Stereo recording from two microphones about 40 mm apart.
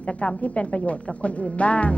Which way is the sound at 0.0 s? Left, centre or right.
Left.